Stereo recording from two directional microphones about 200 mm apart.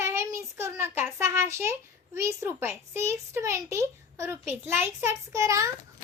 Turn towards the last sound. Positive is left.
turn(degrees=-15)  # may be behind; listen again after turning